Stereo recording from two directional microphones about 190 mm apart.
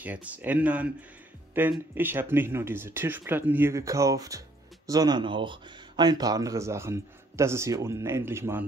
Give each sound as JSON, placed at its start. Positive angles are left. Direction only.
{"t": 0.0, "sound": "speech", "side_deg": -10}